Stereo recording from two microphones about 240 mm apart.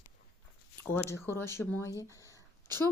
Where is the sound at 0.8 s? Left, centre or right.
Centre.